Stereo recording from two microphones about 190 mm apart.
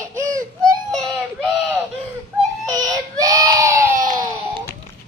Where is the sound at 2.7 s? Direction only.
20° right (ahead or behind).